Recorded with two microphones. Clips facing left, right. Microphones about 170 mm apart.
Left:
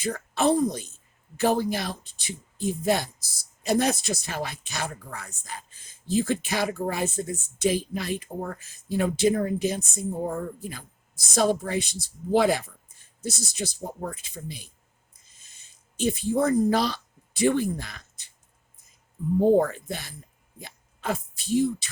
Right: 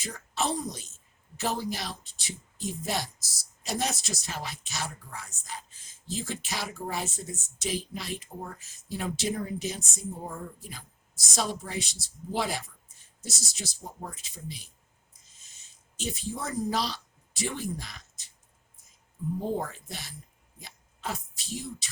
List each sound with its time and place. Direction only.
0.0 s a woman's voice: 55° left (ahead or behind)
15.3 s a sound: 55° left (ahead or behind)
19.5 s speech: 60° left (ahead or behind)